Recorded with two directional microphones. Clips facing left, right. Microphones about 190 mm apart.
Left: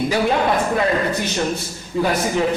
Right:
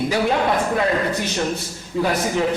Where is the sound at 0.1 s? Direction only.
15° left (ahead or behind).